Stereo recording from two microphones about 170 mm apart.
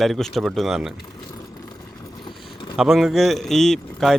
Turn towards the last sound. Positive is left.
turn(degrees=0)  # may be behind; listen again after turning